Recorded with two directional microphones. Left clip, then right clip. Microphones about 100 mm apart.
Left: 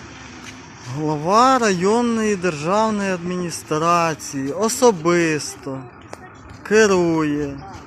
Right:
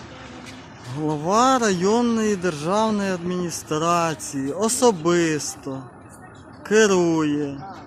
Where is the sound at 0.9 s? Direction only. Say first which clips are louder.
Left 2 dB; 20° left (ahead or behind).